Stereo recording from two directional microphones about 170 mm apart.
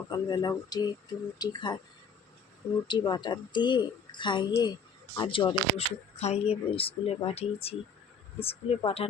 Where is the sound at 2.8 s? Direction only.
25° left (ahead or behind).